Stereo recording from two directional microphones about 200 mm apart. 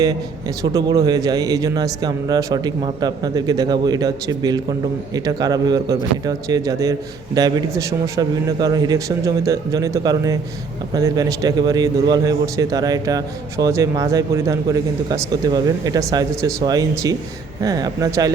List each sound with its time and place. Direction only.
0.6 s a man's voice: 20° right (ahead or behind)